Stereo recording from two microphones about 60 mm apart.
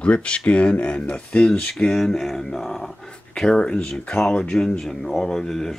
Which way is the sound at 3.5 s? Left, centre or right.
Centre.